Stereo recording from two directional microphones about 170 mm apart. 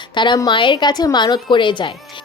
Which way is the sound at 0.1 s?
25° left (ahead or behind).